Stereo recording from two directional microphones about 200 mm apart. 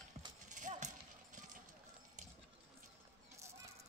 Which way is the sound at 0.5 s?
40° right (ahead or behind).